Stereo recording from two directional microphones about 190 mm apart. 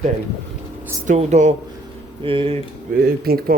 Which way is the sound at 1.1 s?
40° right (ahead or behind).